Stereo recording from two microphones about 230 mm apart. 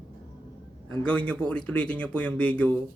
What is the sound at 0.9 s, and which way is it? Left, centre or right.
Speech, centre.